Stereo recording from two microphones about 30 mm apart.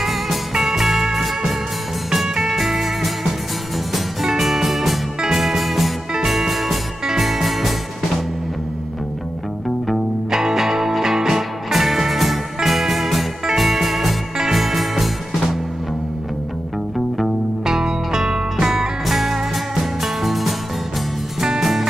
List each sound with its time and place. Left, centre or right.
0.0 s music: centre
2.0 s music: centre
4.3 s music: centre
10.3 s music: centre
17.6 s music: centre
19.0 s music: centre